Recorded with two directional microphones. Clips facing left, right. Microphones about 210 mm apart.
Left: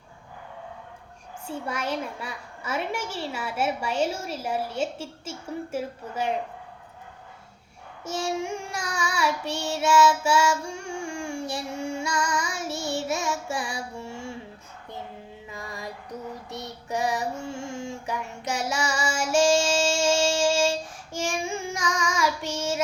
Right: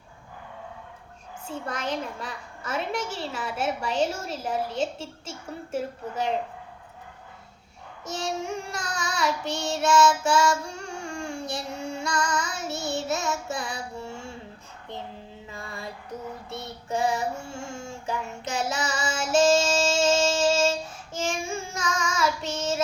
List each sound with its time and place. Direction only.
1.5 s a child's voice: 10° left (ahead or behind)
8.0 s child singing: 10° left (ahead or behind)
15.5 s music: 15° left (ahead or behind)
16.5 s child singing: 15° left (ahead or behind)